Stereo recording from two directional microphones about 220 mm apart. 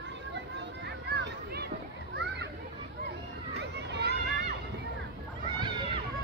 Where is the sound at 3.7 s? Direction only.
50° right (ahead or behind).